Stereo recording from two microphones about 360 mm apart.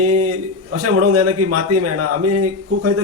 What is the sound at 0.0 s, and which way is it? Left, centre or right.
A man's voice, right.